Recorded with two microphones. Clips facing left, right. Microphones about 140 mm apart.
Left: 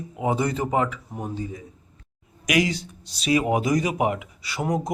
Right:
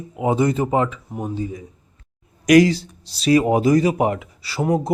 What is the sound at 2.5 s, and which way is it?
A man's voice, 35° right (ahead or behind).